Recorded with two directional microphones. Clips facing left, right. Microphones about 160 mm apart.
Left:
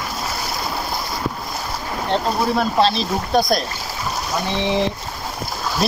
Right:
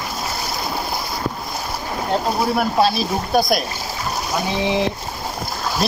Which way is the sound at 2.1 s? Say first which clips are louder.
Even; 10° right (ahead or behind).